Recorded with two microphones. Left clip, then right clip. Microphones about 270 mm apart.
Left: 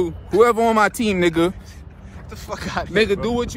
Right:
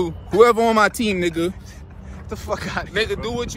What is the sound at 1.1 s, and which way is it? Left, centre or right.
Speech, centre.